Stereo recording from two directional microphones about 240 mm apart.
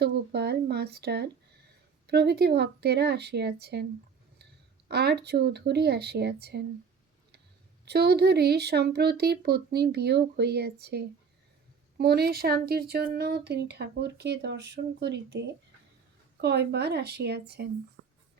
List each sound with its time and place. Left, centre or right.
0.0 s speech: right
4.9 s speech: right
7.9 s speech: right
18.0 s music: right